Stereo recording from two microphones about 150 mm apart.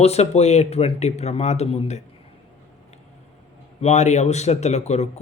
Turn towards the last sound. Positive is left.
turn(degrees=50)  # may be behind; listen again after turning